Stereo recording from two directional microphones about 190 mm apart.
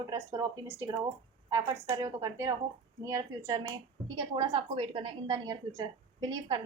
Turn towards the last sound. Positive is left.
turn(degrees=-20)  # may be behind; listen again after turning